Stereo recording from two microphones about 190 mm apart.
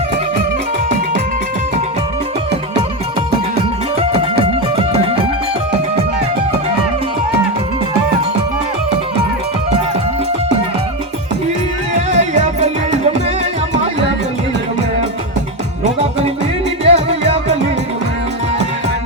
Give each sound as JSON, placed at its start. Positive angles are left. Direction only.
{"t": 3.9, "sound": "music", "side_deg": -30}
{"t": 12.1, "sound": "music", "side_deg": -35}
{"t": 15.8, "sound": "music", "side_deg": -30}